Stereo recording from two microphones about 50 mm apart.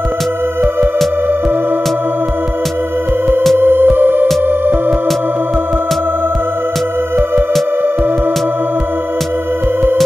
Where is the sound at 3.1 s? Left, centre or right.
Right.